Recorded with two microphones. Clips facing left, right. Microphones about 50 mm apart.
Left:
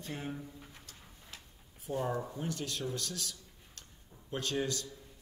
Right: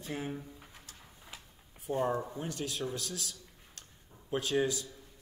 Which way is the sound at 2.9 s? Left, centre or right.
Centre.